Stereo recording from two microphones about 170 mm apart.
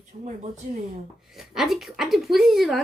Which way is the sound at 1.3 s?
Centre (ahead or behind).